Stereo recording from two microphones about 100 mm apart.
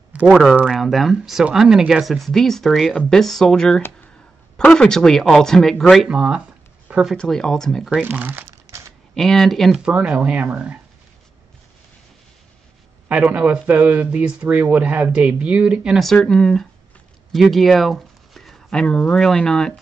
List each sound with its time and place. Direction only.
0.3 s speech: centre (ahead or behind)
6.0 s speech: 10° right (ahead or behind)
7.2 s speech: 5° left (ahead or behind)
7.9 s crumpling: 20° right (ahead or behind)
9.1 s speech: 5° left (ahead or behind)
9.8 s speech: 10° right (ahead or behind)
13.1 s speech: 15° right (ahead or behind)
16.0 s speech: 5° left (ahead or behind)